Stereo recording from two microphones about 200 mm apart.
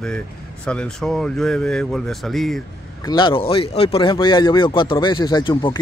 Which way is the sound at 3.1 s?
25° left (ahead or behind).